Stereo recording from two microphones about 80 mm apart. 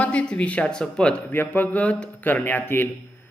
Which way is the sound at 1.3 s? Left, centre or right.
Left.